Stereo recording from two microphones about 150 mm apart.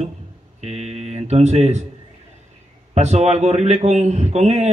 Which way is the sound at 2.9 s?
50° right (ahead or behind).